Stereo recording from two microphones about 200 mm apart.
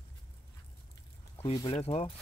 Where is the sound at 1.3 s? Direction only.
25° left (ahead or behind).